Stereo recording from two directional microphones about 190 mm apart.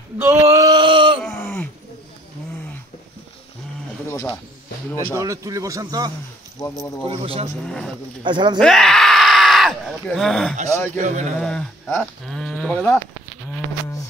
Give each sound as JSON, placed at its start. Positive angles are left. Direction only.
{"t": 0.2, "sound": "a sound", "side_deg": -15}
{"t": 1.2, "sound": "groan", "side_deg": 10}
{"t": 4.1, "sound": "a sound", "side_deg": 15}
{"t": 5.1, "sound": "speech", "side_deg": -15}
{"t": 6.6, "sound": "speech", "side_deg": 15}
{"t": 7.1, "sound": "speech", "side_deg": -30}
{"t": 7.6, "sound": "speech", "side_deg": 5}
{"t": 8.2, "sound": "speech", "side_deg": -25}
{"t": 8.5, "sound": "a sound", "side_deg": 0}
{"t": 11.0, "sound": "speech", "side_deg": -40}
{"t": 11.3, "sound": "speech", "side_deg": 5}